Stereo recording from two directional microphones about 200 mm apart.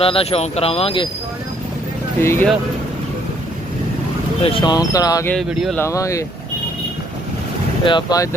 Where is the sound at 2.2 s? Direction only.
10° left (ahead or behind).